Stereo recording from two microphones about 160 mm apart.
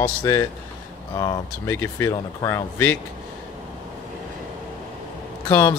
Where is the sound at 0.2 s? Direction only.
20° left (ahead or behind).